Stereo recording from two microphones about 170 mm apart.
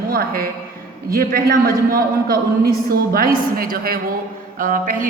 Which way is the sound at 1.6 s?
60° right (ahead or behind).